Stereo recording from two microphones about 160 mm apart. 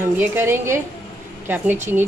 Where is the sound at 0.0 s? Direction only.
15° right (ahead or behind).